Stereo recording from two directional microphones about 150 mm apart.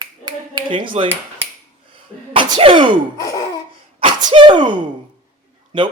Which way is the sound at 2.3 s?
35° right (ahead or behind).